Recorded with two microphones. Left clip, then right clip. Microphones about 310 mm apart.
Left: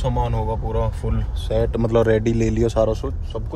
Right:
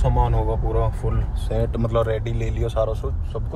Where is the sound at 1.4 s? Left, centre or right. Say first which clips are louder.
Left 5 dB; left.